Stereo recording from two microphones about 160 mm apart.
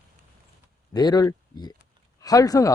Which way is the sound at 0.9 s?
25° left (ahead or behind).